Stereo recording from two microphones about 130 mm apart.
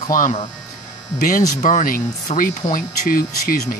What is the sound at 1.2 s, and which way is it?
Speech, 90° left.